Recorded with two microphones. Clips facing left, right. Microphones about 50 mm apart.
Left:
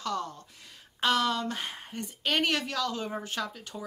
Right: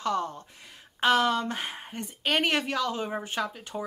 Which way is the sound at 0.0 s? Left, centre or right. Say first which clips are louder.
Right 4 dB; right.